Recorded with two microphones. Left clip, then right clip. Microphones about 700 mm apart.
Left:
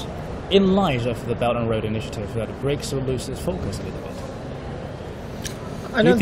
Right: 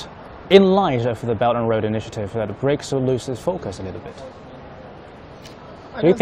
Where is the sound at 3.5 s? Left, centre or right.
Right.